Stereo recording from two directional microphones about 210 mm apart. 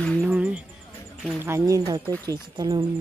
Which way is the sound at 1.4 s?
15° right (ahead or behind).